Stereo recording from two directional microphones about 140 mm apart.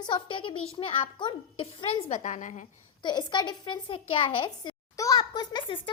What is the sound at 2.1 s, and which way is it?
Speech, 60° left (ahead or behind).